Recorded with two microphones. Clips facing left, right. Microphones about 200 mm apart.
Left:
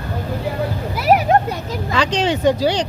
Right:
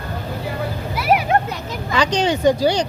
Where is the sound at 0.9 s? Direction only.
40° left (ahead or behind).